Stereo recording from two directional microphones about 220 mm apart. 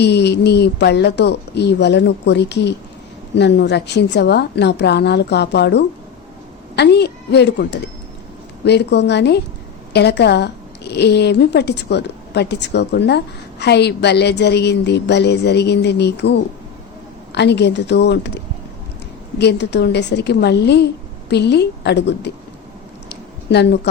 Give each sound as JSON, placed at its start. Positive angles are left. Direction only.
{"t": 0.0, "sound": "a woman's voice", "side_deg": 50}
{"t": 19.4, "sound": "a woman's voice", "side_deg": 50}
{"t": 23.5, "sound": "a woman's voice", "side_deg": 50}